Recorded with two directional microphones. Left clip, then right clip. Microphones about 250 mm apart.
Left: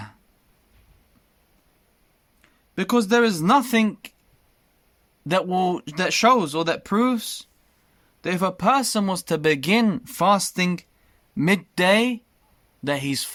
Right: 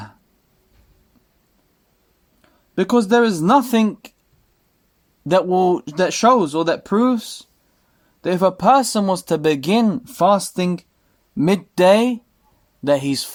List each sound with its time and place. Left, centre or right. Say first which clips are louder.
2.7 s speech: right 4 dB; left
5.4 s speech: right 6 dB; left
8.6 s speech: right 5 dB; left